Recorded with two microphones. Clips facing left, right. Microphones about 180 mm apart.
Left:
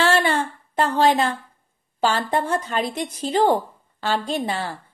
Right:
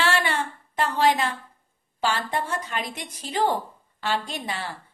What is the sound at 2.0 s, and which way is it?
A woman's voice, 30° left (ahead or behind).